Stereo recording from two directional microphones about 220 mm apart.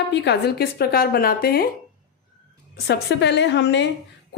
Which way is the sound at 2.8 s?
50° left (ahead or behind).